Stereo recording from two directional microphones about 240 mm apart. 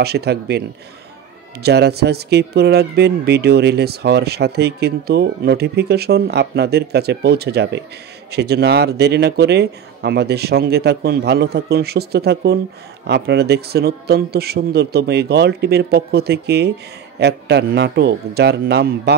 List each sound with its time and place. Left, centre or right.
0.0 s speech: right